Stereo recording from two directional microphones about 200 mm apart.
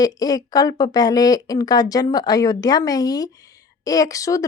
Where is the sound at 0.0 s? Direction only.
20° left (ahead or behind).